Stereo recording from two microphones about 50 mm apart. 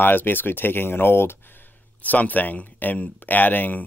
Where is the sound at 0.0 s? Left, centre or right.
Left.